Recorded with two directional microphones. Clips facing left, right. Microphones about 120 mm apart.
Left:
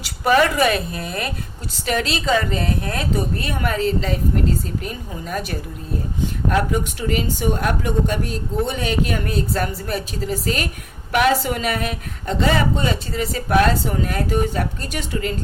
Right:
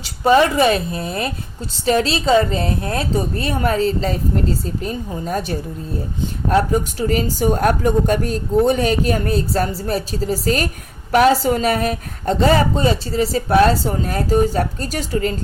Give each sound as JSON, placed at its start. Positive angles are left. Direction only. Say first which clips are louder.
{"t": 0.0, "sound": "a woman's voice", "louder": "right 3 dB", "side_deg": -25}